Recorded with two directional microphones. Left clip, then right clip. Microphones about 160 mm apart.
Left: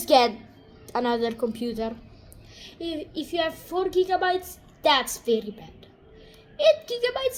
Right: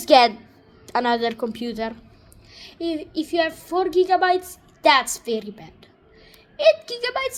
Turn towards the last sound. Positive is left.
turn(degrees=-20)  # may be behind; listen again after turning